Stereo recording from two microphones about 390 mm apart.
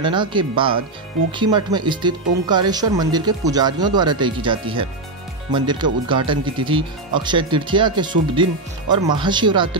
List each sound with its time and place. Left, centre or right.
0.0 s speech: centre